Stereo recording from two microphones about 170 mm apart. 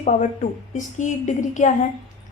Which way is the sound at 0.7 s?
45° left (ahead or behind).